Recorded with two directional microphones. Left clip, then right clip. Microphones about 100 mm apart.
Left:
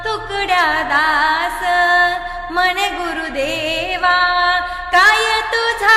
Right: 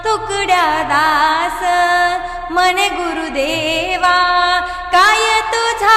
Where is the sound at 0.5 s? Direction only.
30° right (ahead or behind).